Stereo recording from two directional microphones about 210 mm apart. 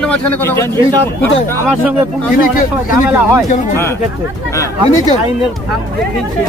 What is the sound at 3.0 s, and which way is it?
Speech, 5° right (ahead or behind).